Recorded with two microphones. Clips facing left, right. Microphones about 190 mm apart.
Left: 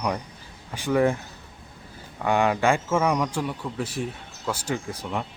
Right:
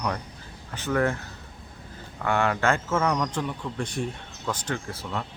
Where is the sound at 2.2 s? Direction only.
15° left (ahead or behind).